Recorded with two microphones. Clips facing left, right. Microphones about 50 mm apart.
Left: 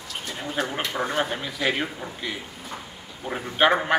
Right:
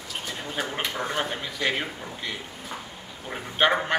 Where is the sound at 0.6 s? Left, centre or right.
Centre.